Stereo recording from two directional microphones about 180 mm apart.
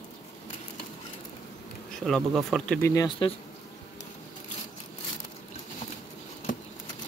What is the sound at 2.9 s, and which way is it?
Speech, 25° left (ahead or behind).